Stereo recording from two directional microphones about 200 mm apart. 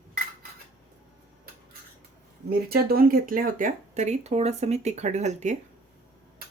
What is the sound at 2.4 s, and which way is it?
Speech, 50° right (ahead or behind).